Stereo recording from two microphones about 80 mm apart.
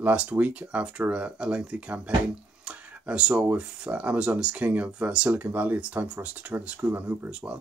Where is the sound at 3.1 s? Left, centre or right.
Centre.